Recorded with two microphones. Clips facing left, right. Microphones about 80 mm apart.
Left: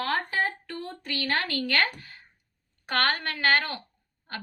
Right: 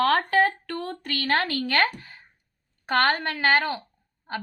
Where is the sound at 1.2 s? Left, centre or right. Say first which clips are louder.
Right 4 dB; right.